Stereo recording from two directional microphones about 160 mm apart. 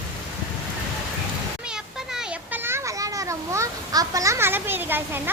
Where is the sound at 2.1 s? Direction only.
10° right (ahead or behind).